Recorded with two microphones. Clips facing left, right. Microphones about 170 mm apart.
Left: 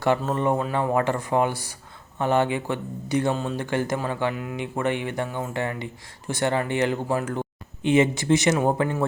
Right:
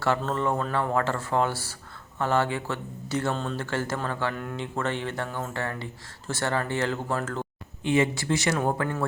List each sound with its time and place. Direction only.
0.2 s speech: 15° left (ahead or behind)